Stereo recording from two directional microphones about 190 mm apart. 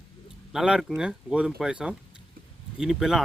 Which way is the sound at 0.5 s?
5° right (ahead or behind).